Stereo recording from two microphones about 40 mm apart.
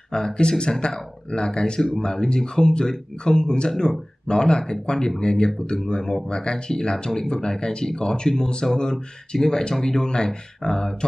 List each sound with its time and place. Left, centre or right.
0.1 s speech: left